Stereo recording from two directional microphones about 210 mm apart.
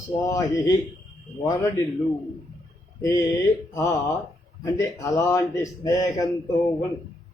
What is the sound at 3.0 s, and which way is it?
Speech, 15° left (ahead or behind).